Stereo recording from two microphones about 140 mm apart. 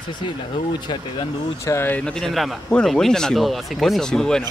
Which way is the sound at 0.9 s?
35° left (ahead or behind).